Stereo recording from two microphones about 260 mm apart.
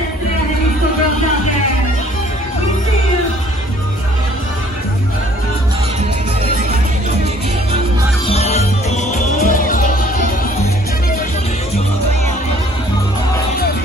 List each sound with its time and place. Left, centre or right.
8.3 s music: left